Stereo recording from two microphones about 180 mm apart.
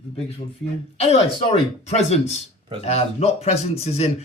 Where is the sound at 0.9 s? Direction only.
35° left (ahead or behind).